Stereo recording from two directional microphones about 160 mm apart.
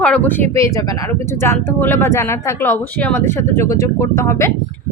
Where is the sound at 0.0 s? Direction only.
10° left (ahead or behind).